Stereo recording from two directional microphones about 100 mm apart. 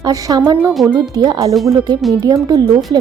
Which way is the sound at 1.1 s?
45° right (ahead or behind).